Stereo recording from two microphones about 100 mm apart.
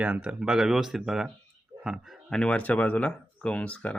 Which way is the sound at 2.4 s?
10° left (ahead or behind).